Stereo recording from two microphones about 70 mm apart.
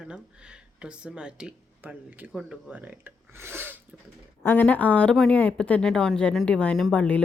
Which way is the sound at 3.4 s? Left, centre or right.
Right.